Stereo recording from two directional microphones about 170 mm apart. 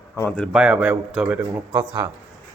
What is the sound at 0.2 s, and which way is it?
Speech, 5° left (ahead or behind).